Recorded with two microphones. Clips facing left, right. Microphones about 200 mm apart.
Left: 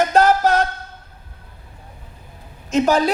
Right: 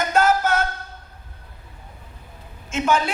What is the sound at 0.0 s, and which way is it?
Music, 35° left (ahead or behind).